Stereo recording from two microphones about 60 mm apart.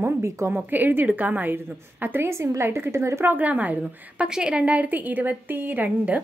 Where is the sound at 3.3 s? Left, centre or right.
Right.